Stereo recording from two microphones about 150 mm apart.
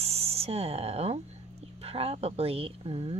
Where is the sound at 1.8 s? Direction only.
40° right (ahead or behind).